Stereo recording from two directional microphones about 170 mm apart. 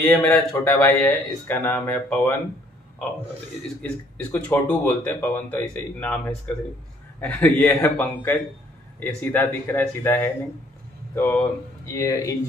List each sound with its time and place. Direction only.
0.2 s speech: 5° left (ahead or behind)
3.8 s speech: 10° left (ahead or behind)